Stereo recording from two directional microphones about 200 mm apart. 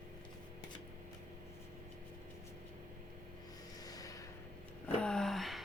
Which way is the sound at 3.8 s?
20° left (ahead or behind).